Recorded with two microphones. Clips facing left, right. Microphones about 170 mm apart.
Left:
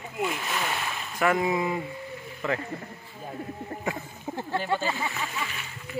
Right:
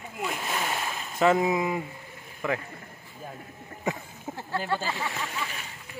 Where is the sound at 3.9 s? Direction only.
20° left (ahead or behind).